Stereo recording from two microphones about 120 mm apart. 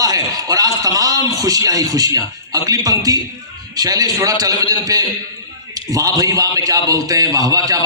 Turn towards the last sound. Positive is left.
turn(degrees=-30)  # may be behind; listen again after turning